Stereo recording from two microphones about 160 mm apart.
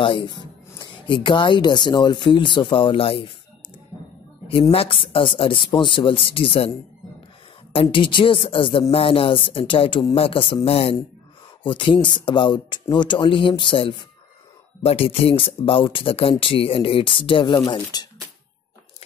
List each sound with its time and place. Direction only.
0.0 s speech: 30° left (ahead or behind)
4.5 s speech: 35° left (ahead or behind)
7.7 s speech: 30° left (ahead or behind)